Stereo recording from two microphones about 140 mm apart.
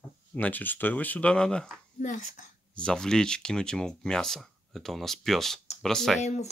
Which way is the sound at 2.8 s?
5° left (ahead or behind).